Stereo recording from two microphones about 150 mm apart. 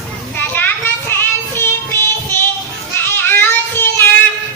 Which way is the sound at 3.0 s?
15° left (ahead or behind).